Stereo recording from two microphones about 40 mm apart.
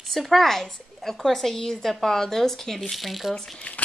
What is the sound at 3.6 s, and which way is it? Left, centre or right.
Speech, left.